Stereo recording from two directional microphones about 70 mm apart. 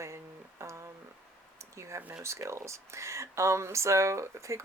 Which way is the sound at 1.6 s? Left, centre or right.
Right.